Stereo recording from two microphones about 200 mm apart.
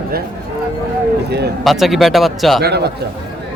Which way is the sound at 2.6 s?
55° right (ahead or behind).